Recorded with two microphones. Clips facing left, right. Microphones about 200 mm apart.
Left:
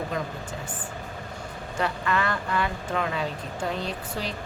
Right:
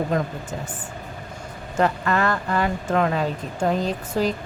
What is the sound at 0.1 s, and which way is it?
Speech, 45° right (ahead or behind).